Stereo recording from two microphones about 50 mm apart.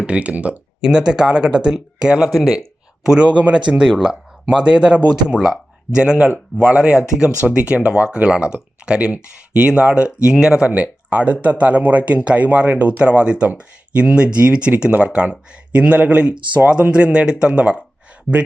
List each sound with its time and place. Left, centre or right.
0.0 s speech: right
0.8 s speech: centre
3.8 s speech: centre
4.4 s speech: centre
10.7 s speech: right